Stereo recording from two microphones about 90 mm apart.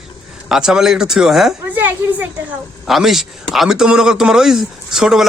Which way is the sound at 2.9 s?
Centre (ahead or behind).